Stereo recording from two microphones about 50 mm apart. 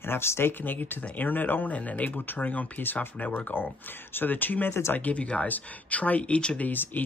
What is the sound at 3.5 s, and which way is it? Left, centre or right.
Speech, left.